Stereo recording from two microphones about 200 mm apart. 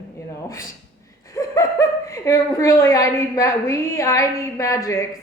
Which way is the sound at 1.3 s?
15° left (ahead or behind).